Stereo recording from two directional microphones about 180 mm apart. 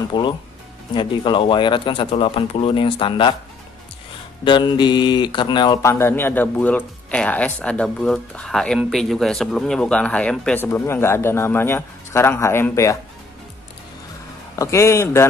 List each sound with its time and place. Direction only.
0.1 s speech: 25° left (ahead or behind)
4.5 s speech: 25° left (ahead or behind)
14.5 s speech: 15° left (ahead or behind)